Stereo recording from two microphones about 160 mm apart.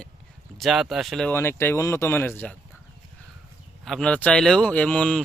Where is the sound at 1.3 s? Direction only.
15° left (ahead or behind).